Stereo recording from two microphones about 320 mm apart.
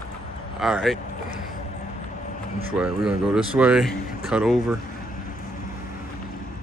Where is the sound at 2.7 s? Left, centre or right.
Centre.